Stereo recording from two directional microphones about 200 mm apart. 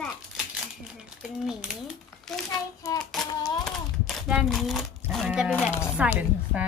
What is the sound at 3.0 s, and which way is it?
Child singing, centre (ahead or behind).